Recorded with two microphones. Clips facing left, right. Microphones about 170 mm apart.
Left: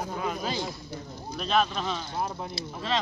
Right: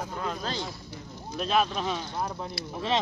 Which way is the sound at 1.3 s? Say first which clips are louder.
Even; 5° right (ahead or behind).